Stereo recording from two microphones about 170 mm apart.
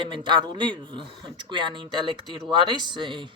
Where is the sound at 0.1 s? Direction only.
30° right (ahead or behind).